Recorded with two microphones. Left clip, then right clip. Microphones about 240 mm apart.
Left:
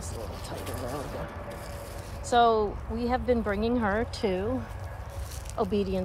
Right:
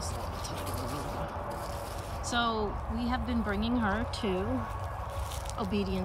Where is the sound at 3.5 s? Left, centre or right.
Right.